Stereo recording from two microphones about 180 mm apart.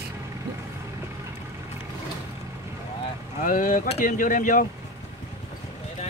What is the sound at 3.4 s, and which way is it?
Speech, 50° left (ahead or behind).